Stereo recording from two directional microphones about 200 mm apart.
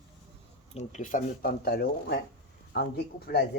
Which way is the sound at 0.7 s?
40° left (ahead or behind).